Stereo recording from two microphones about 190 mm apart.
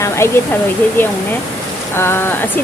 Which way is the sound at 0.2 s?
15° left (ahead or behind).